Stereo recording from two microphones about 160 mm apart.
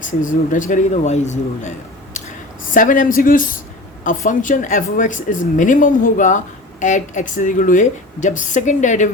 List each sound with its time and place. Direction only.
0.0 s speech: 55° left (ahead or behind)
2.7 s speech: 55° left (ahead or behind)